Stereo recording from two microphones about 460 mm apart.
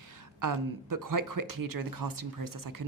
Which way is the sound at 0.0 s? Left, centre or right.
Right.